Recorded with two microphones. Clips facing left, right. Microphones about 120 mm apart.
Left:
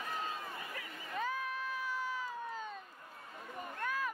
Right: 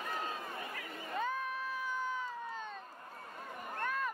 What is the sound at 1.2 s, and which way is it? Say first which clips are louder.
Cat: right 1 dB; centre (ahead or behind).